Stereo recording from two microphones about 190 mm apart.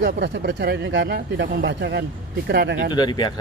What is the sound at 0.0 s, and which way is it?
Speech, 55° right (ahead or behind).